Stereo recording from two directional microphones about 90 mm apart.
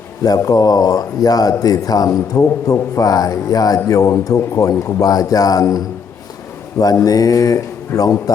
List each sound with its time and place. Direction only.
0.2 s speech: 40° left (ahead or behind)
6.9 s speech: 40° left (ahead or behind)